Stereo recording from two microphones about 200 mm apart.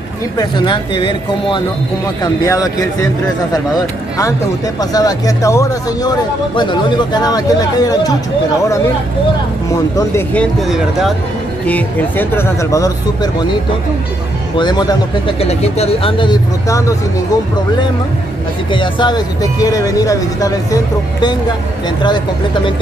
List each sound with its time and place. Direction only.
0.4 s speech: 20° left (ahead or behind)
4.7 s speech: 20° left (ahead or behind)
9.9 s speech: 10° left (ahead or behind)
14.6 s speech: 20° left (ahead or behind)
15.4 s speech: 30° left (ahead or behind); by 16.9 s 15° left (ahead or behind)
18.7 s speech: 25° left (ahead or behind)